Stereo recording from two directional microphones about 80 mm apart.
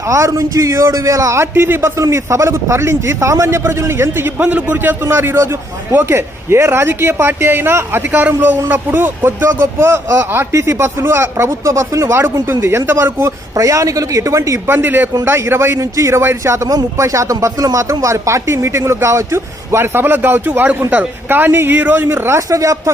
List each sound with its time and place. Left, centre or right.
0.1 s a man's voice: right
4.4 s a man's voice: centre; by 12.1 s right
12.1 s a man's voice: right
13.6 s a man's voice: right